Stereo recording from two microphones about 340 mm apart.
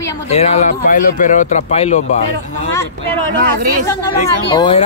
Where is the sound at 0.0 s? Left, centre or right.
Centre.